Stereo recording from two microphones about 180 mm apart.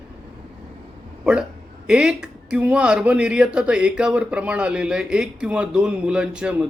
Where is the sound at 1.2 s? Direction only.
5° right (ahead or behind).